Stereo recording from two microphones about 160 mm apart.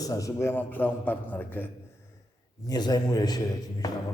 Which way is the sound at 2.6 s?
25° left (ahead or behind).